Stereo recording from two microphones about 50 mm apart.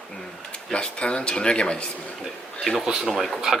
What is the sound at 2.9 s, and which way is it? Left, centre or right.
Speech, centre.